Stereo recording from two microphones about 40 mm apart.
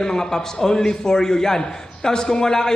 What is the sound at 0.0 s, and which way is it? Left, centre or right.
A man's voice, centre.